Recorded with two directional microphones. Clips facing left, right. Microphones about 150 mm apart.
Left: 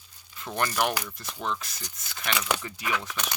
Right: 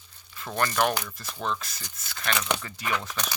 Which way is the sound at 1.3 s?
10° right (ahead or behind).